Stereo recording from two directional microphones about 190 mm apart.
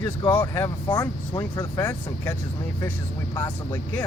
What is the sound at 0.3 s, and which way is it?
Speech, 15° left (ahead or behind).